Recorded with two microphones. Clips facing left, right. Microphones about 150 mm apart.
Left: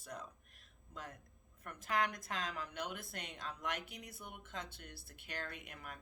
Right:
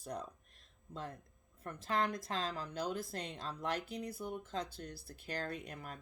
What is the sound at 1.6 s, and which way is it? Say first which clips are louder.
Speech: right 2 dB; 30° right (ahead or behind).